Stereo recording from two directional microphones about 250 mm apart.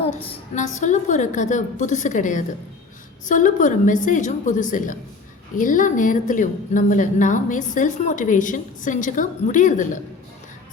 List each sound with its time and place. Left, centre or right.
0.0 s a woman's voice: left